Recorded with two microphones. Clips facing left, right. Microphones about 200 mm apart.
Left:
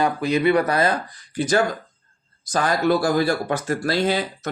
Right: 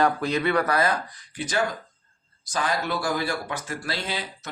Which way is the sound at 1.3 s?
40° left (ahead or behind).